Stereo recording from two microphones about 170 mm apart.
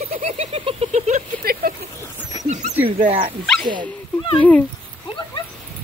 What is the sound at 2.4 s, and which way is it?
Speech, 45° right (ahead or behind).